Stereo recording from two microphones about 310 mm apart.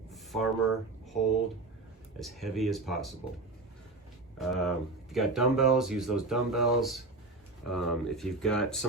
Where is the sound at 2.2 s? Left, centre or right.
Centre.